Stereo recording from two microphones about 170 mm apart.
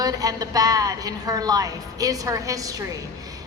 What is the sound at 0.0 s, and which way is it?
A woman's voice, 20° right (ahead or behind).